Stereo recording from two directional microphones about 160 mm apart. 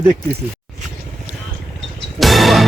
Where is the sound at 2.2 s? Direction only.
Centre (ahead or behind).